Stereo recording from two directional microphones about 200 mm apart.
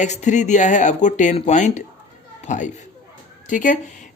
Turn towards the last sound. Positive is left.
turn(degrees=40)  # may be behind; listen again after turning